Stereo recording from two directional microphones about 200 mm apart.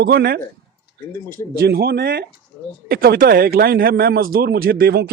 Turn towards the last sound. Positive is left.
turn(degrees=-50)  # may be behind; listen again after turning